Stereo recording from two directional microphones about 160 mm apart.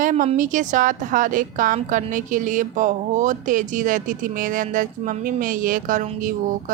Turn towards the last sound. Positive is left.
turn(degrees=-55)  # may be behind; listen again after turning